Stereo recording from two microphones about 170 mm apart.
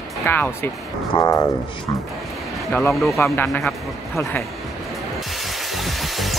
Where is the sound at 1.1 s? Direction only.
20° left (ahead or behind).